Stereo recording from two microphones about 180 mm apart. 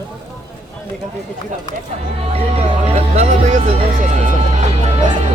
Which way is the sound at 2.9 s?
40° right (ahead or behind).